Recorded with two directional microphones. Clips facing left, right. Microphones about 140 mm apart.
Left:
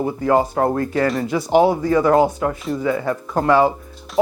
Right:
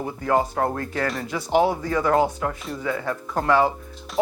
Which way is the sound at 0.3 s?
25° left (ahead or behind).